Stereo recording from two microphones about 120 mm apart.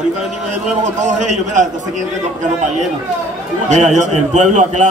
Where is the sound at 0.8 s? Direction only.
90° right.